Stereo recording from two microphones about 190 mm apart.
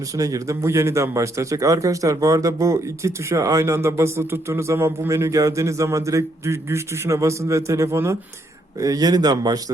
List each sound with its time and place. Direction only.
0.2 s speech: 20° right (ahead or behind)